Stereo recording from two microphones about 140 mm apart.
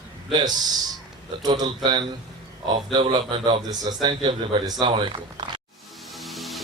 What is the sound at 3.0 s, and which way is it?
Speech, 40° right (ahead or behind).